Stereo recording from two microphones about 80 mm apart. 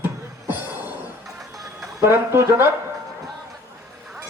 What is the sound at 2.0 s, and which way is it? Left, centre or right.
Speech, right.